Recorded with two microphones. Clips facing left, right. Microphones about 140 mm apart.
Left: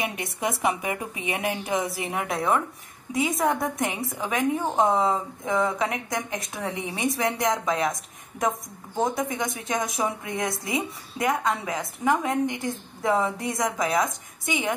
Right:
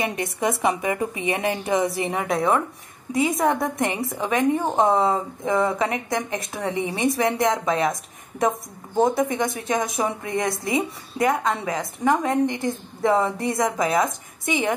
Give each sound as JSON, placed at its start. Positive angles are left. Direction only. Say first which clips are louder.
{"t": 0.0, "sound": "a woman's voice", "louder": "right 4 dB", "side_deg": 0}